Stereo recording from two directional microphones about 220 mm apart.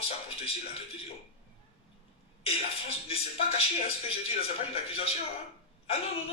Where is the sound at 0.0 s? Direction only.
25° left (ahead or behind).